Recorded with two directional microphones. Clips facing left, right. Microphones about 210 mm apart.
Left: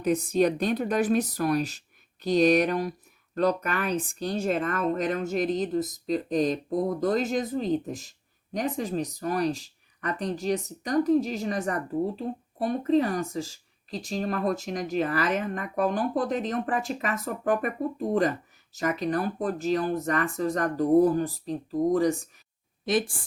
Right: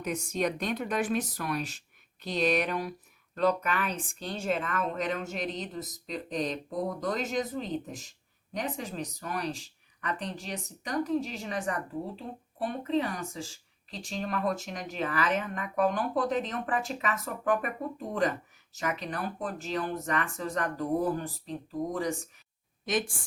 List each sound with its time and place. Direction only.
0.0 s speech: 35° left (ahead or behind)